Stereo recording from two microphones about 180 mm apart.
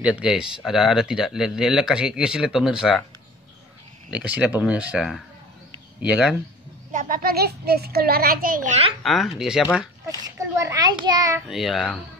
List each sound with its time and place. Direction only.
0.0 s speech: 5° right (ahead or behind)
4.1 s speech: 5° right (ahead or behind)
6.9 s a child's voice: 50° right (ahead or behind)
9.0 s speech: centre (ahead or behind)
10.6 s a child's voice: 20° right (ahead or behind)
11.4 s speech: centre (ahead or behind)